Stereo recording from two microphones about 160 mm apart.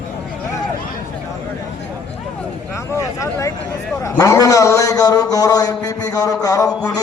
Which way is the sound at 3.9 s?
20° left (ahead or behind).